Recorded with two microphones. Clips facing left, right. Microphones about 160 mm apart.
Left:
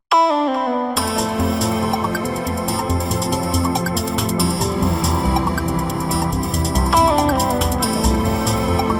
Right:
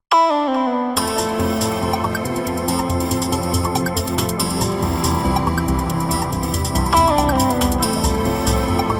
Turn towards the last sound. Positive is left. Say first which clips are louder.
# right 1 dB
turn(degrees=0)  # may be behind; listen again after turning